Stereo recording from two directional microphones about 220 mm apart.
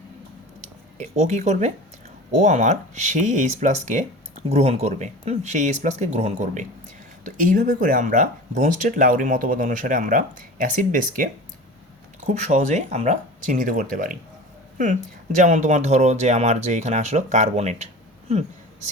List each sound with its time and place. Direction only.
0.9 s speech: 30° right (ahead or behind)
15.4 s speech: 30° right (ahead or behind)